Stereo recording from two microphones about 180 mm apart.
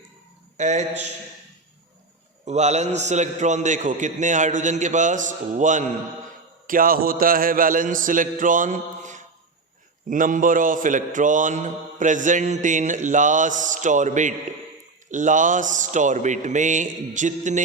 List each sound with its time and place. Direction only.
0.5 s a man's voice: 40° right (ahead or behind)
2.4 s mantra: 40° right (ahead or behind)